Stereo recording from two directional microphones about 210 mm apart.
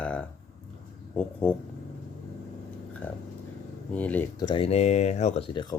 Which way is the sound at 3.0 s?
10° left (ahead or behind).